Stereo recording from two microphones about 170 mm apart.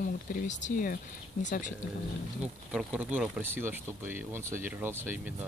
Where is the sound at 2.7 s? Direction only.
5° right (ahead or behind).